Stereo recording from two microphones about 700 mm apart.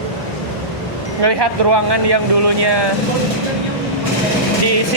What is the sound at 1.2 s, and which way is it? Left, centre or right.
Speech, right.